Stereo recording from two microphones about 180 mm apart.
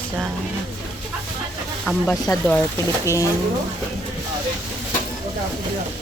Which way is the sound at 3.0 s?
15° left (ahead or behind).